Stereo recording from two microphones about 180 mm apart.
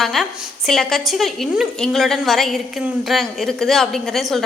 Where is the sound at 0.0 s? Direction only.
Centre (ahead or behind).